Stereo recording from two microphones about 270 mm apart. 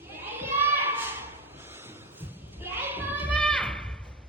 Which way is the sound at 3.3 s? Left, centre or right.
Centre.